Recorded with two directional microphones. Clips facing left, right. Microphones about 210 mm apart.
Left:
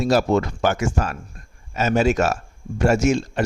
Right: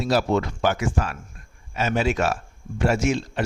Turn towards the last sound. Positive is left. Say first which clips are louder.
# left 4 dB
turn(degrees=45)  # may be behind; listen again after turning